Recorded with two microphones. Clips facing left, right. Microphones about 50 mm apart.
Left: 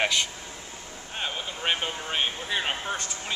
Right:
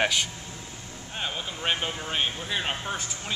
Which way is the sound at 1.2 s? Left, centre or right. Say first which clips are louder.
Even; centre.